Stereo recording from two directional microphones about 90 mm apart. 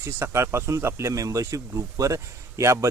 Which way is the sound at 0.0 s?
30° right (ahead or behind).